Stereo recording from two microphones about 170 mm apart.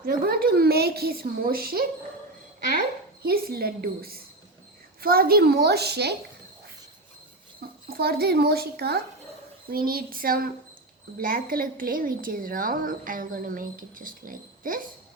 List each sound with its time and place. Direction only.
0.0 s a woman's voice: 60° right (ahead or behind)
3.2 s a woman's voice: 65° right (ahead or behind)
7.9 s a child's voice: 65° right (ahead or behind)